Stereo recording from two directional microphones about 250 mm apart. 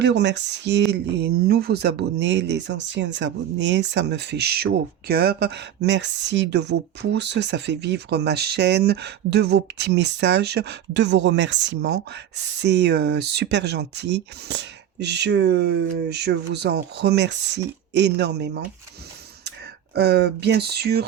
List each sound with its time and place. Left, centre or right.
0.0 s speech: right